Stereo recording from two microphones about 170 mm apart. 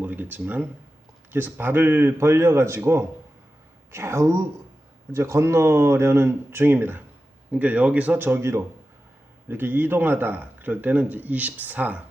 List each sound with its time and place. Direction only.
0.0 s speech: 10° right (ahead or behind)